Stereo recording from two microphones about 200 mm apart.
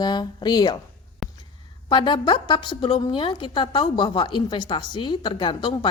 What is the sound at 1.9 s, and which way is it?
A woman's voice, 25° left (ahead or behind).